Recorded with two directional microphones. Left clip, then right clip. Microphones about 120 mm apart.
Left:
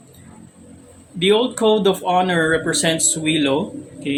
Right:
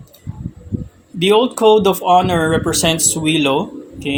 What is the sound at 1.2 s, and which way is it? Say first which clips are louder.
Speech: right 4 dB; 45° right (ahead or behind).